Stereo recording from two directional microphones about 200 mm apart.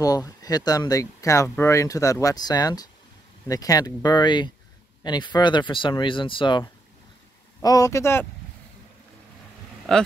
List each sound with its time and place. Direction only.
0.0 s speech: 20° left (ahead or behind)
9.9 s speech: 5° left (ahead or behind)